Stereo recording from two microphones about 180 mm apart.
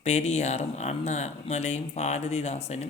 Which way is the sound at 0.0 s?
35° left (ahead or behind).